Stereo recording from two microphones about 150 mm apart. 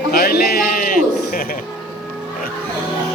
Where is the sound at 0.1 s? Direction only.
85° left; by 1.5 s 65° left (ahead or behind).